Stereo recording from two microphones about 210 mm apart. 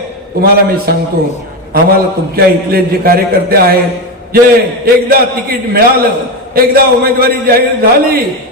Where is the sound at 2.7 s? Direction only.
45° right (ahead or behind).